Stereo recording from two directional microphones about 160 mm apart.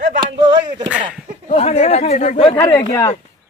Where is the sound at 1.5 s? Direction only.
40° left (ahead or behind).